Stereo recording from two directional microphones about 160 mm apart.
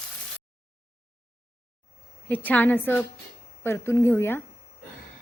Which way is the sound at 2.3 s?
10° left (ahead or behind).